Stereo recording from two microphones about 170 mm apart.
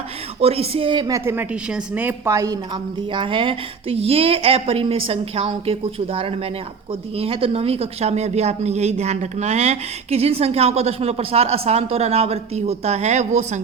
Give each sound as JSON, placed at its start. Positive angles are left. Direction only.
{"t": 0.3, "sound": "speech", "side_deg": -35}
{"t": 1.2, "sound": "a woman's voice", "side_deg": -10}
{"t": 7.2, "sound": "speech", "side_deg": -35}